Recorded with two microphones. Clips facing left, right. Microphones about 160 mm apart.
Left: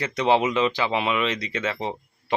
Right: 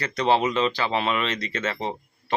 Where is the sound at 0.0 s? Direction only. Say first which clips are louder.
Left 1 dB; 15° left (ahead or behind).